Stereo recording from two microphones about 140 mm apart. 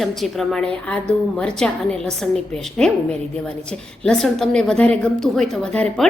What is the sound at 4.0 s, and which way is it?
A woman's voice, 5° left (ahead or behind).